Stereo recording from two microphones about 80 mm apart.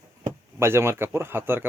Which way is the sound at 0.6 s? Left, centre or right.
Right.